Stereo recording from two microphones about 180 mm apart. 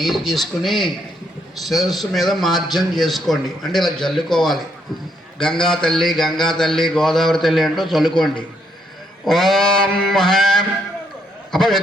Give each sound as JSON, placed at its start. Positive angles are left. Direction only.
{"t": 0.0, "sound": "a man's voice", "side_deg": 0}